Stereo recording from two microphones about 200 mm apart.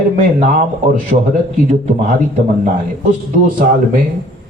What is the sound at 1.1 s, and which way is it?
Speech, 45° right (ahead or behind).